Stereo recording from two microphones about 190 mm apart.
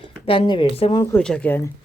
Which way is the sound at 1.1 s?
5° left (ahead or behind).